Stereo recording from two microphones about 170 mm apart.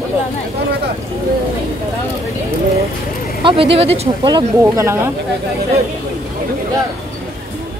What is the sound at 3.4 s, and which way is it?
Speech, 30° right (ahead or behind).